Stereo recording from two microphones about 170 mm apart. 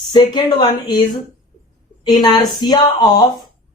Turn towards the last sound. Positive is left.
turn(degrees=25)  # may be behind; listen again after turning